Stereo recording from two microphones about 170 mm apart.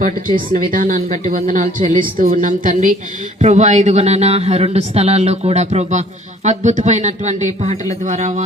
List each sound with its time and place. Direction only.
0.5 s speech: 55° right (ahead or behind)